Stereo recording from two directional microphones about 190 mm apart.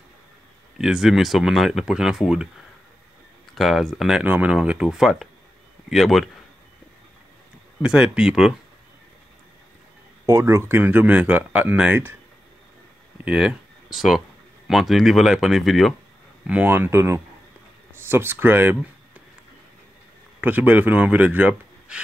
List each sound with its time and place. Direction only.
0.7 s speech: centre (ahead or behind)
3.5 s speech: centre (ahead or behind)
7.8 s speech: 5° right (ahead or behind)
10.2 s speech: 15° right (ahead or behind)
13.2 s speech: 5° right (ahead or behind)
20.3 s speech: 10° right (ahead or behind)